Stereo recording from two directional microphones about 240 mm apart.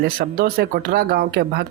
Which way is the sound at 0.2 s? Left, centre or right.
Right.